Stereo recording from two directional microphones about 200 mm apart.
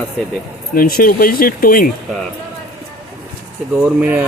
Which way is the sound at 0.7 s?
45° left (ahead or behind).